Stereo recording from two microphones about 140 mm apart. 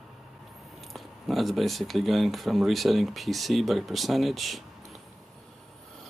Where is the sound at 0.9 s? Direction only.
Centre (ahead or behind).